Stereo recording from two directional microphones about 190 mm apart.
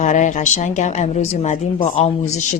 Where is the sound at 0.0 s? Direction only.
40° left (ahead or behind).